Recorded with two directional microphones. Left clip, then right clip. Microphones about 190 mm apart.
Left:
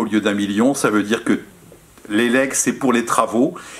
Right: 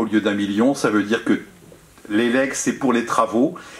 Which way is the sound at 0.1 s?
30° left (ahead or behind).